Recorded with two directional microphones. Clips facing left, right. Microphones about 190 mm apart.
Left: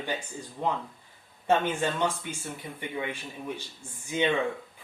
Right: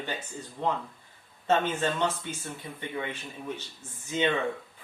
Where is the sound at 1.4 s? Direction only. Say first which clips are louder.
Left 1 dB; 10° left (ahead or behind).